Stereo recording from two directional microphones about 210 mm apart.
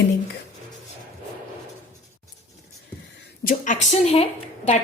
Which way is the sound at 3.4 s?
35° left (ahead or behind).